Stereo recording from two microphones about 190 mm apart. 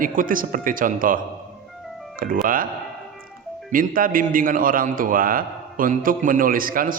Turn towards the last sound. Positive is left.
turn(degrees=-45)  # may be behind; listen again after turning